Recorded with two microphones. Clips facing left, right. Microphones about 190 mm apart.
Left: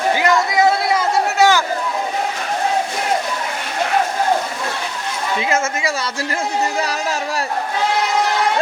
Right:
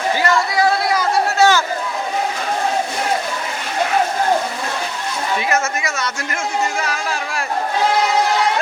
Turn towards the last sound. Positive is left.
turn(degrees=40)  # may be behind; listen again after turning